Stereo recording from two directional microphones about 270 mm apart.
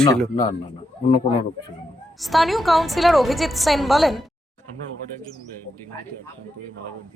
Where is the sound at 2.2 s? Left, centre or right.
Centre.